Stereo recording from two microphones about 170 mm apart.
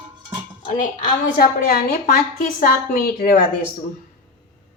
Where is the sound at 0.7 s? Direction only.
55° left (ahead or behind).